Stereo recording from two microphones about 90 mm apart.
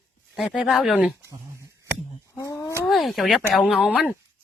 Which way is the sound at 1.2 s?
35° right (ahead or behind).